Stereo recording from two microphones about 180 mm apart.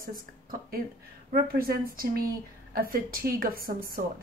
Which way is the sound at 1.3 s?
55° right (ahead or behind).